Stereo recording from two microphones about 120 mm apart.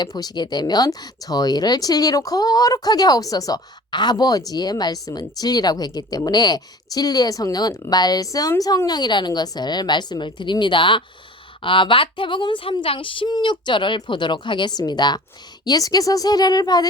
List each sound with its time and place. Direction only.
0.0 s speech: 35° left (ahead or behind)